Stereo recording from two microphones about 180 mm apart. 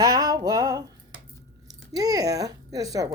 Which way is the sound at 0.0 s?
20° right (ahead or behind).